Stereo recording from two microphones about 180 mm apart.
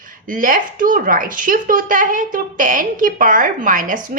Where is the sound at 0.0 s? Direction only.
50° right (ahead or behind).